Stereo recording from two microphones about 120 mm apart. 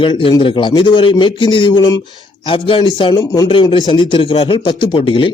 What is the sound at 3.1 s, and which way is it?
Speech, 30° left (ahead or behind).